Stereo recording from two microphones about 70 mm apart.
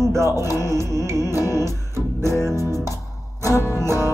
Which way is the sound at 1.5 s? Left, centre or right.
Right.